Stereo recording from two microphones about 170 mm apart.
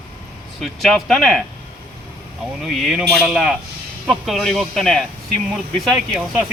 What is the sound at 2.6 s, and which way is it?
Speech, centre (ahead or behind).